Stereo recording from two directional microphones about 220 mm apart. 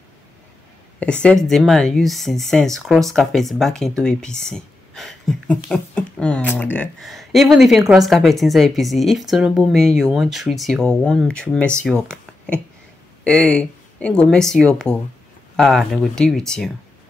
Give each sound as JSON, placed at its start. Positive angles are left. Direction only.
{"t": 0.9, "sound": "speech", "side_deg": 5}